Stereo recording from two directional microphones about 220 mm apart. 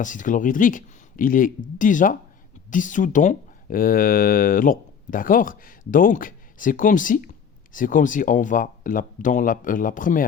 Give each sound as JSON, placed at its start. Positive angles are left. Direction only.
{"t": 0.0, "sound": "speech", "side_deg": 35}